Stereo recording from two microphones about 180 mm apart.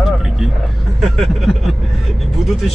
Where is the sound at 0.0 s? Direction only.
Centre (ahead or behind).